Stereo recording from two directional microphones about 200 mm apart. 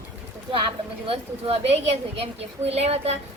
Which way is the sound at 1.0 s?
30° right (ahead or behind).